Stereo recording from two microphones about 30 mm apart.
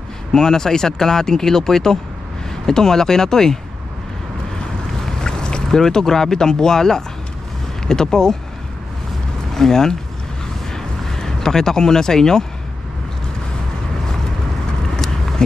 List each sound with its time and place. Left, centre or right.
0.3 s speech: left
5.0 s boat: left
5.8 s speech: centre
9.5 s speech: centre
10.7 s a sound: centre